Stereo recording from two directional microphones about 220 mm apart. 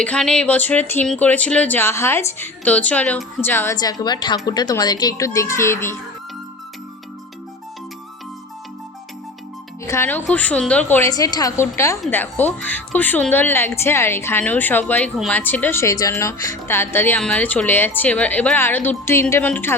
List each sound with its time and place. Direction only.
0.0 s a woman's voice: 5° left (ahead or behind)
9.8 s speech: 10° left (ahead or behind)